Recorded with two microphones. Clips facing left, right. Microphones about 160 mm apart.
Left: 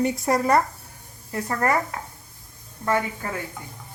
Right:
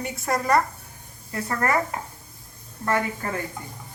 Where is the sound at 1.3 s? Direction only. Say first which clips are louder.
Left 1 dB; 10° left (ahead or behind).